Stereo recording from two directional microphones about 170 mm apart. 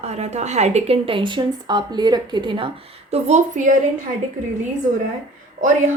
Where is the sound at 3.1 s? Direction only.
45° right (ahead or behind).